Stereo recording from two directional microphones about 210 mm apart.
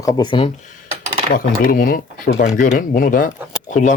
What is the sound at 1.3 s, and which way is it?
Speech, 40° left (ahead or behind).